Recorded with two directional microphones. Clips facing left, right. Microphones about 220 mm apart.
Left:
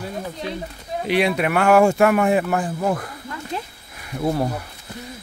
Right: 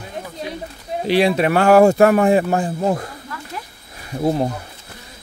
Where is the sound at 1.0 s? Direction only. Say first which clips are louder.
Right 4 dB; 30° right (ahead or behind).